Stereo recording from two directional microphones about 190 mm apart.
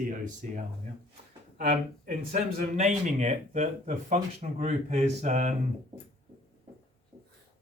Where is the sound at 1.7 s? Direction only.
40° right (ahead or behind).